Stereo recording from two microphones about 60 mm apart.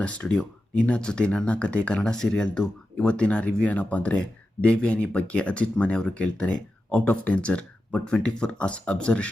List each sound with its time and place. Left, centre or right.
0.0 s speech: centre
2.0 s speech: centre